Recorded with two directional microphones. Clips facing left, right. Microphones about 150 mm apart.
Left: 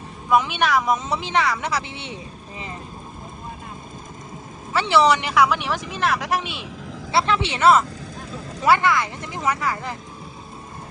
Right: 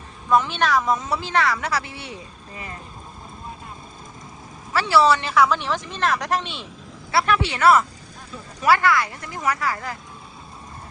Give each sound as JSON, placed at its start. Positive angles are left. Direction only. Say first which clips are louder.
{"t": 0.3, "sound": "a woman's voice", "louder": "even", "side_deg": 15}
{"t": 4.7, "sound": "a woman's voice", "louder": "even", "side_deg": 20}
{"t": 7.1, "sound": "speech", "louder": "even", "side_deg": 25}